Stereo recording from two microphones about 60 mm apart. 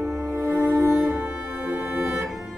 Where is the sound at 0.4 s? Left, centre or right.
Right.